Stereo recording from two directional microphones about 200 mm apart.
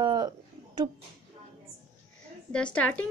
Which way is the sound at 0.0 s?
20° right (ahead or behind).